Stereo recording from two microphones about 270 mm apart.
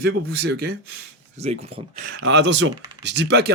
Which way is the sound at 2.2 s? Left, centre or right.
Right.